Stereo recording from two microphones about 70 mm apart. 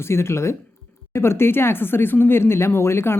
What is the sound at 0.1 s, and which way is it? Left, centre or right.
Speech, left.